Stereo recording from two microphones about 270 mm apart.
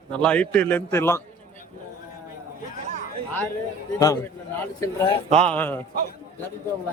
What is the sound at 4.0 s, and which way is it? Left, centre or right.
A man's voice, centre.